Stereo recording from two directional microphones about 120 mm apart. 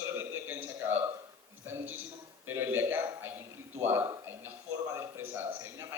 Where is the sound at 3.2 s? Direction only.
20° right (ahead or behind).